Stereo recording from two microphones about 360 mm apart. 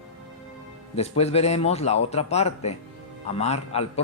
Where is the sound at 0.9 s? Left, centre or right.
Centre.